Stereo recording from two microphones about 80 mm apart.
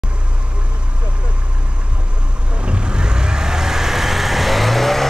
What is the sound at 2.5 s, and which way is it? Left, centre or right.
Vehicle, centre.